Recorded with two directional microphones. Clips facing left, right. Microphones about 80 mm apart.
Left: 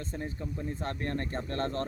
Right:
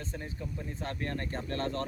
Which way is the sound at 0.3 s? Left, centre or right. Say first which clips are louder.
Left 3 dB; left.